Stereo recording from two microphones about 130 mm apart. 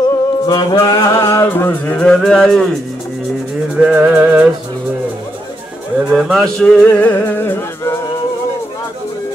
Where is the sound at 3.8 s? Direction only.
10° right (ahead or behind).